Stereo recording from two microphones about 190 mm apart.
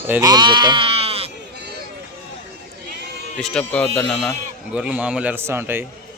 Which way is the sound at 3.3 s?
5° left (ahead or behind).